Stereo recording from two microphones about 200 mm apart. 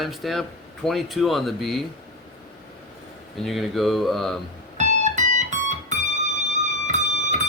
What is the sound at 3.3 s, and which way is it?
Speech, centre (ahead or behind).